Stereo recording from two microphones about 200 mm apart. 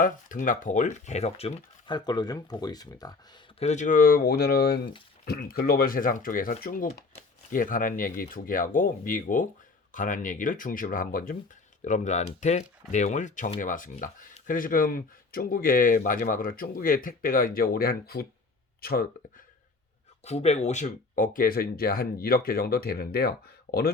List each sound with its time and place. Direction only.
0.0 s speech: 40° left (ahead or behind); by 3.2 s 20° left (ahead or behind)
3.6 s speech: 35° left (ahead or behind)
20.2 s speech: 30° left (ahead or behind)